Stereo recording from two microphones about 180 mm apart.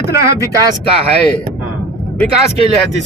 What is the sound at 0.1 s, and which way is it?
Speech, 60° left (ahead or behind).